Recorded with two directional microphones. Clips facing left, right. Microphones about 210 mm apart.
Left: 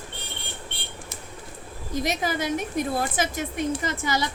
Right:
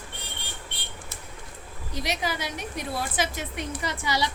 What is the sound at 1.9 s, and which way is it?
A woman's voice, 45° left (ahead or behind).